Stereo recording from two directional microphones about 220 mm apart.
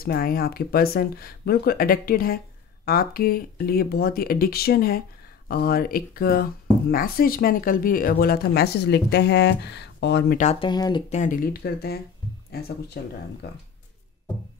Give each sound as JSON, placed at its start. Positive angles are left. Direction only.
{"t": 0.0, "sound": "speech", "side_deg": 45}
{"t": 10.3, "sound": "speech", "side_deg": 30}
{"t": 11.1, "sound": "speech", "side_deg": 35}